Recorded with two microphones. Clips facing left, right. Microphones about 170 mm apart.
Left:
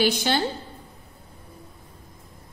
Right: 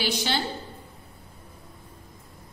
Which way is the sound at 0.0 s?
50° left (ahead or behind).